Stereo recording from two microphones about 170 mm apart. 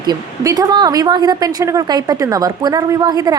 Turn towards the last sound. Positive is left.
turn(degrees=-25)  # may be behind; listen again after turning